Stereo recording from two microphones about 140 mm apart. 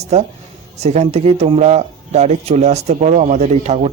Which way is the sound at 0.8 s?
50° right (ahead or behind).